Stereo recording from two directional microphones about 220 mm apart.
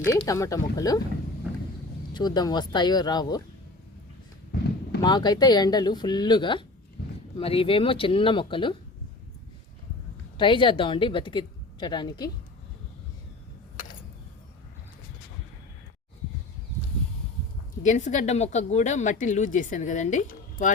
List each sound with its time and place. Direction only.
0.2 s speech: 15° left (ahead or behind)
2.1 s speech: 20° left (ahead or behind)
5.0 s speech: 20° left (ahead or behind)
10.3 s a woman's voice: 20° left (ahead or behind)
17.8 s speech: 35° left (ahead or behind)